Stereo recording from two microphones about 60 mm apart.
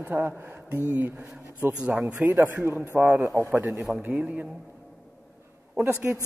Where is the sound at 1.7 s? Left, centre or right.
Centre.